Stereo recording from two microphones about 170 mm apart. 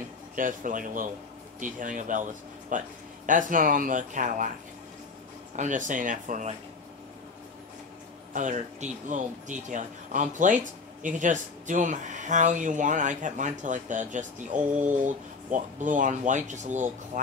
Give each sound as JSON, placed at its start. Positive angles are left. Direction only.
{"t": 0.4, "sound": "speech", "side_deg": -50}
{"t": 5.6, "sound": "speech", "side_deg": -50}
{"t": 8.3, "sound": "speech", "side_deg": -50}